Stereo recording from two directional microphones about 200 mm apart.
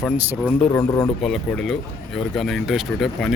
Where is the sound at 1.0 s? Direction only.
Centre (ahead or behind).